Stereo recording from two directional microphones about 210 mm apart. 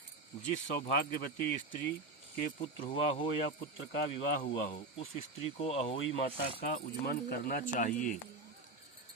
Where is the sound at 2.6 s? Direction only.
20° left (ahead or behind).